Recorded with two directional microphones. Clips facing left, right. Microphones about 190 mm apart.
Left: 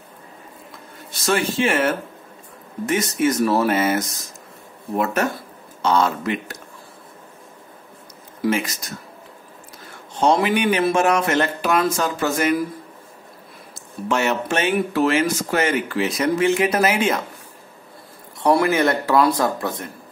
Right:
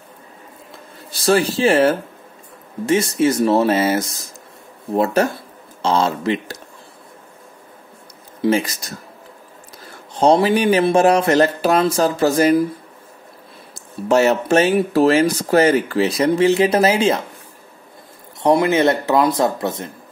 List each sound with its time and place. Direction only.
1.1 s speech: 35° right (ahead or behind)
8.4 s speech: 35° right (ahead or behind)
10.2 s speech: 35° right (ahead or behind)
14.0 s speech: 35° right (ahead or behind)
18.4 s speech: 20° right (ahead or behind)